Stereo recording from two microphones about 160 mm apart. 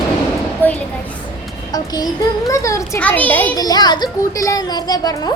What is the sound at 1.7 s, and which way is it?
Child singing, 25° left (ahead or behind).